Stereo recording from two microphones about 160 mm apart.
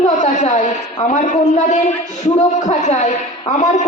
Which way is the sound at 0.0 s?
50° left (ahead or behind).